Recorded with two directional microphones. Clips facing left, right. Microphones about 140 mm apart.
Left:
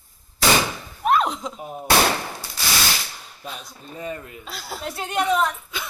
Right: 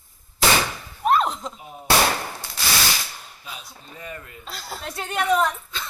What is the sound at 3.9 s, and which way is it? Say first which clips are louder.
Speech: left 6 dB; 30° left (ahead or behind).